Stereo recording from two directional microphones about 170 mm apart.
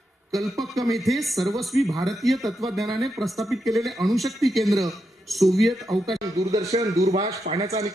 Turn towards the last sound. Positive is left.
turn(degrees=-35)  # may be behind; listen again after turning